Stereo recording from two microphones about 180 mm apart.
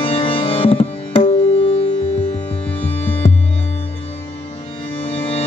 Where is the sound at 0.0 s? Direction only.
30° left (ahead or behind).